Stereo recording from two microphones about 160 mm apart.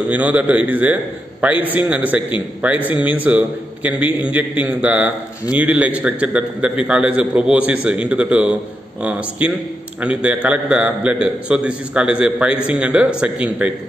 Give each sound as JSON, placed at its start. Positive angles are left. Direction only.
{"t": 0.1, "sound": "a man's voice", "side_deg": -10}